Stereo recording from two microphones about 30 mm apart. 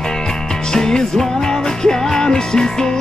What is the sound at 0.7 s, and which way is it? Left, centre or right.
Music, left.